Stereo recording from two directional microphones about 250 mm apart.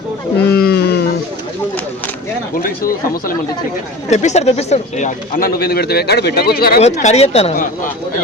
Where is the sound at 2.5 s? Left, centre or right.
Left.